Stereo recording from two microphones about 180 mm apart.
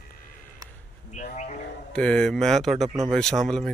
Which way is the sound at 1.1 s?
40° left (ahead or behind).